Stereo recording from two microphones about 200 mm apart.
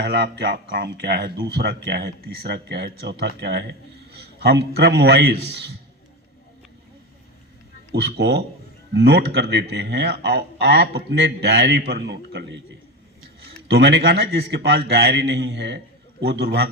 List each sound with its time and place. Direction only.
0.0 s a man's voice: 55° right (ahead or behind)
7.9 s speech: 55° right (ahead or behind)
13.7 s speech: 55° right (ahead or behind)